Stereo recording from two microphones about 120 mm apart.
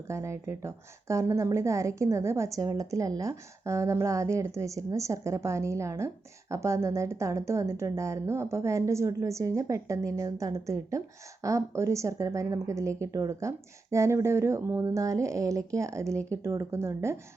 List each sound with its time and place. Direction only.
0.1 s a woman's voice: 25° right (ahead or behind)